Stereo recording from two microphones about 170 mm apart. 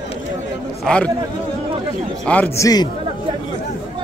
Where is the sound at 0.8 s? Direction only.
5° left (ahead or behind).